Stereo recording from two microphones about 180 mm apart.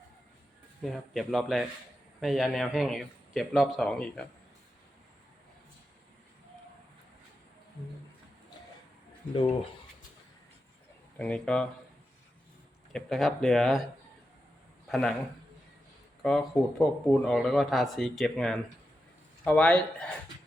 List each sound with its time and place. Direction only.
0.8 s speech: centre (ahead or behind)
9.3 s speech: 30° left (ahead or behind)
11.2 s speech: 5° left (ahead or behind)
12.9 s speech: centre (ahead or behind)
14.8 s a man's voice: centre (ahead or behind)
16.2 s speech: centre (ahead or behind)